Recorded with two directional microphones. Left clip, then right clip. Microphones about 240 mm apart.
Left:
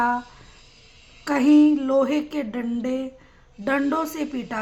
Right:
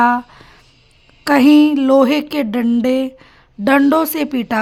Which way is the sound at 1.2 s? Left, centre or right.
Right.